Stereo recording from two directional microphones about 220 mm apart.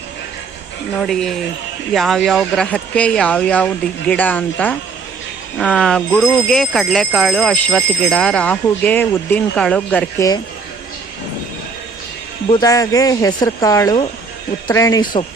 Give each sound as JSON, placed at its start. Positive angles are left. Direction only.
{"t": 0.9, "sound": "speech", "side_deg": 0}
{"t": 12.5, "sound": "speech", "side_deg": 15}